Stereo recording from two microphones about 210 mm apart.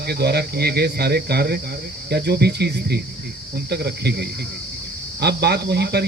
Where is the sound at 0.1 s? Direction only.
50° right (ahead or behind).